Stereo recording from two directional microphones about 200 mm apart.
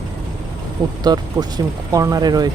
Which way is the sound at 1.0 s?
20° right (ahead or behind).